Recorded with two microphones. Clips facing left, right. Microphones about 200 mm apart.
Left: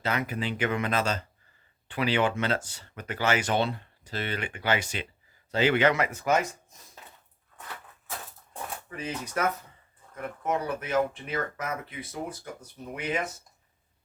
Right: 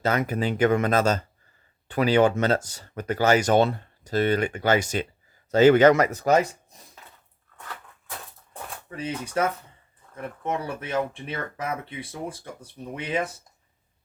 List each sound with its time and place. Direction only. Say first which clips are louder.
0.0 s speech: right 6 dB; 45° right (ahead or behind)
9.0 s speech: right 4 dB; 30° right (ahead or behind)